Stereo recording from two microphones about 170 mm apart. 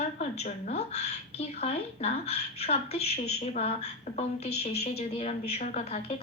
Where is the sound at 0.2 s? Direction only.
40° left (ahead or behind).